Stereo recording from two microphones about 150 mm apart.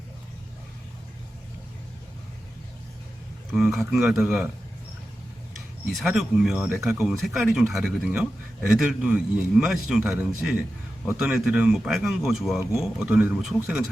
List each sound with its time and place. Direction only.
3.5 s a man's voice: centre (ahead or behind)
5.9 s a man's voice: centre (ahead or behind)
6.6 s speech: 15° right (ahead or behind)
6.8 s a man's voice: centre (ahead or behind)